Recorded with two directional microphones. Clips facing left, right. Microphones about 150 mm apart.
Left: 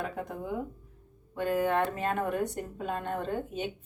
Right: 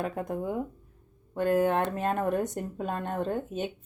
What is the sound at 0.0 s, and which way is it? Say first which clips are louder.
Speech: right 4 dB; 45° right (ahead or behind).